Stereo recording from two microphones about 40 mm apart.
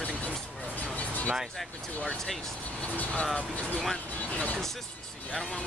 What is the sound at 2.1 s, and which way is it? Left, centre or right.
Speech, centre.